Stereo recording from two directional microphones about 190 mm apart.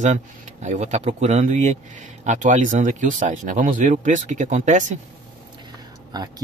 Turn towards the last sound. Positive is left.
turn(degrees=-20)  # may be behind; listen again after turning